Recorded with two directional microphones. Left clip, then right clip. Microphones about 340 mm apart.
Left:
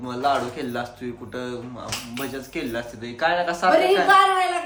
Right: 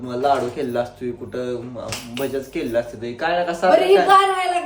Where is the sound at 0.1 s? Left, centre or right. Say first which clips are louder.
Right 3 dB; centre.